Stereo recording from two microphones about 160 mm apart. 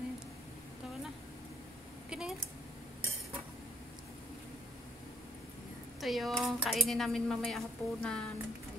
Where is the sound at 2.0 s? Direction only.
5° right (ahead or behind).